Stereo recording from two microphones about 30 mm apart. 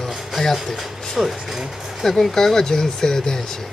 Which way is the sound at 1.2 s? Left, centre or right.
Centre.